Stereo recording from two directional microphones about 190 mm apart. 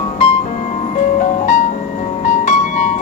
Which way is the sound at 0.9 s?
40° left (ahead or behind).